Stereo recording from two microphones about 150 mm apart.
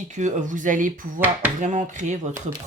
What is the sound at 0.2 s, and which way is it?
Speech, 60° right (ahead or behind).